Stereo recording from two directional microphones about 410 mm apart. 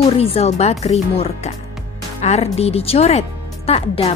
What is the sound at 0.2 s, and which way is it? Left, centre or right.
A woman's voice, centre.